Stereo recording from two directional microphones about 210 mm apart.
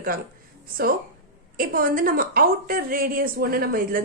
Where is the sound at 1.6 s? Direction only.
40° right (ahead or behind).